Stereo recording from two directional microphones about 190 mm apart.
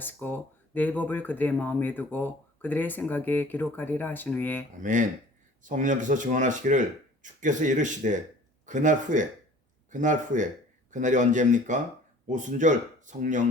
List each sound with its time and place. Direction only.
0.0 s speech: 10° left (ahead or behind)
4.8 s speech: 40° right (ahead or behind)